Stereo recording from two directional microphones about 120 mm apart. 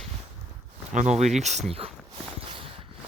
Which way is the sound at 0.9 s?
70° right (ahead or behind).